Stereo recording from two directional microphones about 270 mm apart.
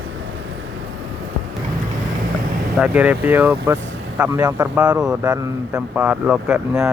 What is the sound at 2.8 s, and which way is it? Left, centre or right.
Speech, centre.